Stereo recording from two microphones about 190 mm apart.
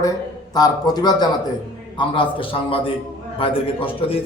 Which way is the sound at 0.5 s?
20° left (ahead or behind).